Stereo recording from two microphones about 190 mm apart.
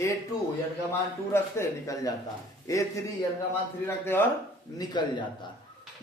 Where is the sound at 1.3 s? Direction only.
15° left (ahead or behind).